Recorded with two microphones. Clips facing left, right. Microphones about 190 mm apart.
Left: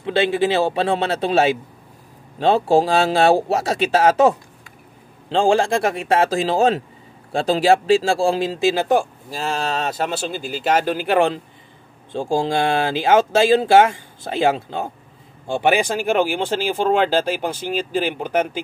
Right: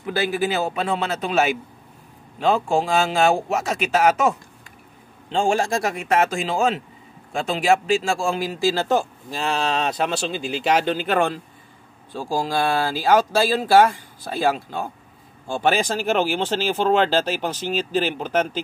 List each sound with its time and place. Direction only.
0.0 s speech: 25° left (ahead or behind)
9.4 s speech: 45° left (ahead or behind)
9.8 s speech: 5° left (ahead or behind)
12.1 s speech: 25° left (ahead or behind)
15.6 s speech: 10° left (ahead or behind)